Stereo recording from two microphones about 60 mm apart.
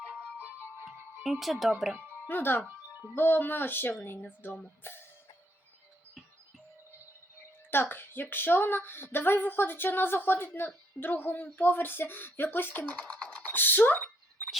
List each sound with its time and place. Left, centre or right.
0.3 s music: right
0.9 s music: centre
2.2 s speech: left
7.7 s speech: left
12.9 s a sound: centre
13.5 s speech: left